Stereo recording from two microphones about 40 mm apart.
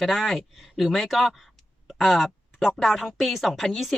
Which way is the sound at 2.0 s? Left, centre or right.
Centre.